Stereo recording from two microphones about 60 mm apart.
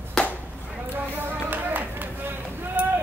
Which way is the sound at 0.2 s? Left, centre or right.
Centre.